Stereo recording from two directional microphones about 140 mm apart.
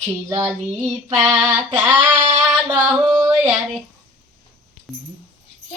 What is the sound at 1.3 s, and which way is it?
Female singing, 5° right (ahead or behind).